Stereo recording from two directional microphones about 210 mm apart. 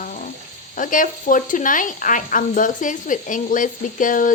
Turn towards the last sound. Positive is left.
turn(degrees=40)  # may be behind; listen again after turning